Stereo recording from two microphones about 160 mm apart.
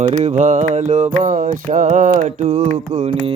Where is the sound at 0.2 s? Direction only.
50° right (ahead or behind).